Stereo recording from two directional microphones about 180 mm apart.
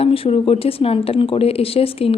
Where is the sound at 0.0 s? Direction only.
30° left (ahead or behind).